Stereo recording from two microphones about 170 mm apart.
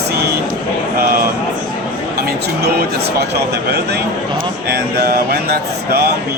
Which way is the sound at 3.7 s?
70° right (ahead or behind).